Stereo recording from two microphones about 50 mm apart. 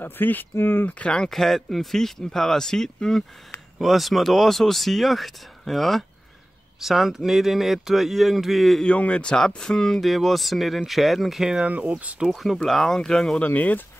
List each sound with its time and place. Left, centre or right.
0.0 s speech: left
0.8 s speech: left
1.3 s speech: centre
3.8 s speech: centre
8.8 s speech: left; by 11.5 s centre
11.6 s speech: right
12.2 s speech: centre
12.6 s speech: centre
13.4 s speech: left